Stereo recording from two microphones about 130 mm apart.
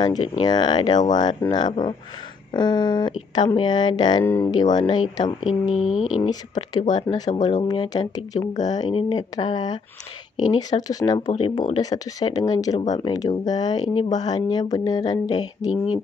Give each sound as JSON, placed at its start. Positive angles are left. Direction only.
{"t": 0.0, "sound": "speech", "side_deg": 30}
{"t": 4.2, "sound": "speech", "side_deg": 20}
{"t": 4.5, "sound": "speech", "side_deg": 30}
{"t": 5.4, "sound": "speech", "side_deg": -5}
{"t": 6.9, "sound": "speech", "side_deg": 35}
{"t": 11.3, "sound": "speech", "side_deg": 45}
{"t": 11.7, "sound": "speech", "side_deg": 30}